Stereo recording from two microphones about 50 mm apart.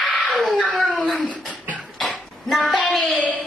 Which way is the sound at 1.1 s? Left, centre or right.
Left.